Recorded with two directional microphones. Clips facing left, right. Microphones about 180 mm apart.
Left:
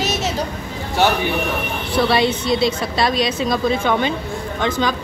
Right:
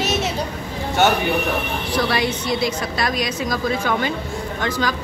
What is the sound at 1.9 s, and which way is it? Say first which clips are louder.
A woman's voice: left 5 dB; 25° left (ahead or behind).